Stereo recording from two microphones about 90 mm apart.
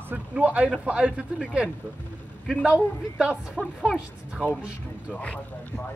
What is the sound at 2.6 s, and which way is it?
A woman's voice, 10° right (ahead or behind).